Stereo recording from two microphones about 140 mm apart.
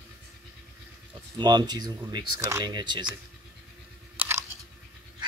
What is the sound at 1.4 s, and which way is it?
Speech, 30° right (ahead or behind).